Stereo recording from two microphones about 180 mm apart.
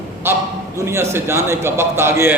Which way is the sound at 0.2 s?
15° right (ahead or behind).